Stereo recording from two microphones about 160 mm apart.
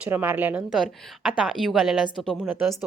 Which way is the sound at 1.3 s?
Centre (ahead or behind).